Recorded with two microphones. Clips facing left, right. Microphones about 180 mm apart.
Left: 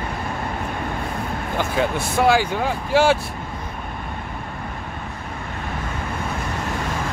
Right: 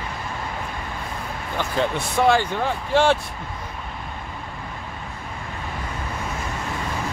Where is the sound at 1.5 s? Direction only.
5° left (ahead or behind).